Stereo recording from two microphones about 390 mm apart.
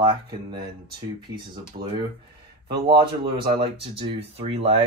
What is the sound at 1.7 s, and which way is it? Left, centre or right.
Speech, centre.